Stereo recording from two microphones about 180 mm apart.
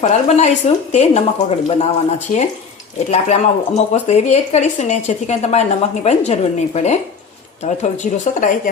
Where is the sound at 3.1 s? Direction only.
35° left (ahead or behind).